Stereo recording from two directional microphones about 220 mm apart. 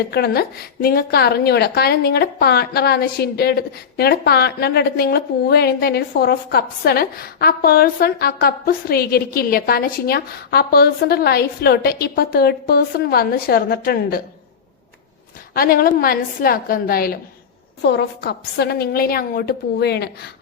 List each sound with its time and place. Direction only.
0.1 s a woman's voice: 45° left (ahead or behind)
15.5 s a woman's voice: 40° left (ahead or behind)